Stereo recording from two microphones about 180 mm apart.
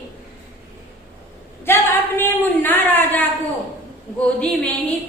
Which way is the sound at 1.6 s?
10° left (ahead or behind).